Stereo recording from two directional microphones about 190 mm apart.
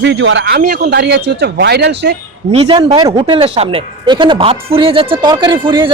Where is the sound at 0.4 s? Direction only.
55° right (ahead or behind).